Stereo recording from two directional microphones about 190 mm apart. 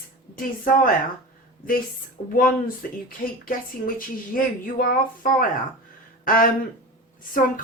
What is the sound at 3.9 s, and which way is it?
A woman's voice, 50° left (ahead or behind).